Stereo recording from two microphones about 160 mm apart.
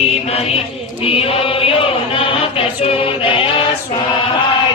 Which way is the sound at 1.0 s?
35° left (ahead or behind).